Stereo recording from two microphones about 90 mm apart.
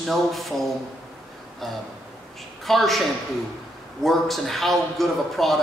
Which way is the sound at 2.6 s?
Centre (ahead or behind).